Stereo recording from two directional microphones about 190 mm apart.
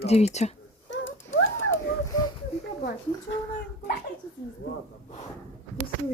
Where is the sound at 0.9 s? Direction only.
85° left.